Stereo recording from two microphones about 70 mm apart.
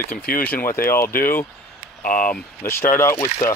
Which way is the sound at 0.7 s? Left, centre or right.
Left.